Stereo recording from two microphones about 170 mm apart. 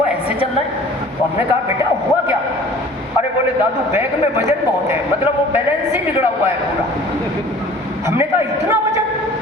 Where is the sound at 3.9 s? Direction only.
15° right (ahead or behind).